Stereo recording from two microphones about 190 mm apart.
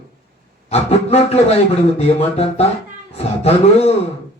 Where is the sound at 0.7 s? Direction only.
35° left (ahead or behind).